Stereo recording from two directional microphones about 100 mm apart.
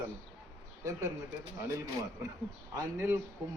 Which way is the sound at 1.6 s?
30° right (ahead or behind).